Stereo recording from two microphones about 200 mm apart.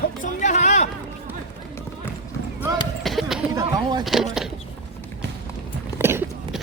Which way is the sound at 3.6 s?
20° right (ahead or behind).